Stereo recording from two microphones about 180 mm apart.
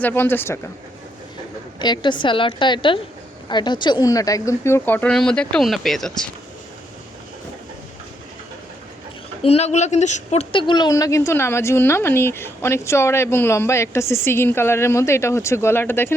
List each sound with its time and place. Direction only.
0.0 s speech: 10° left (ahead or behind)
1.8 s a woman's voice: 25° left (ahead or behind); by 6.2 s centre (ahead or behind)
9.4 s speech: 35° left (ahead or behind); by 16.1 s 10° left (ahead or behind)